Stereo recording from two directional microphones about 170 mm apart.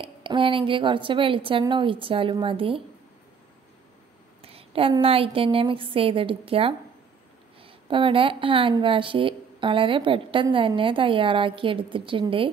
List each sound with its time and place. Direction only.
0.2 s a woman's voice: 30° right (ahead or behind)
4.4 s a sound: 35° right (ahead or behind)
5.0 s a woman's voice: 35° right (ahead or behind)